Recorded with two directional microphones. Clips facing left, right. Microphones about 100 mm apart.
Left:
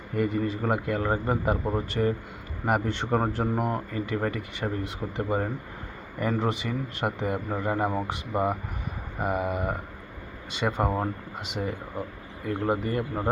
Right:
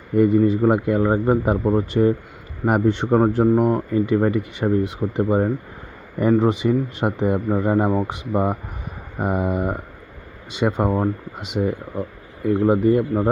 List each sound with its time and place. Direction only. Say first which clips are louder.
0.2 s speech: right 11 dB; 15° right (ahead or behind)
12.6 s speech: right 10 dB; 10° right (ahead or behind)